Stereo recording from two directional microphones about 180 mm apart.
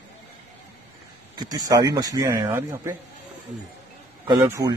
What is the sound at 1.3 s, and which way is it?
Speech, 20° right (ahead or behind).